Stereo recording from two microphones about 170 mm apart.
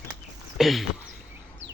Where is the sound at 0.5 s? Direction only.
Centre (ahead or behind).